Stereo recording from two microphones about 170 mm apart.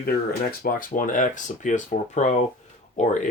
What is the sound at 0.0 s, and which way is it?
Speech, 60° left (ahead or behind).